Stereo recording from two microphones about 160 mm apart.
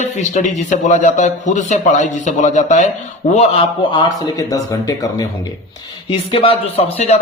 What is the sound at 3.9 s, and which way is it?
A man's voice, 20° left (ahead or behind).